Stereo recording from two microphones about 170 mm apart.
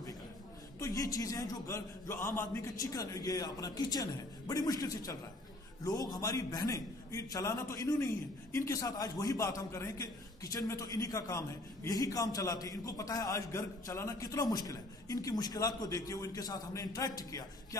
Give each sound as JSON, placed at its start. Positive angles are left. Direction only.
{"t": 0.7, "sound": "a man's voice", "side_deg": 20}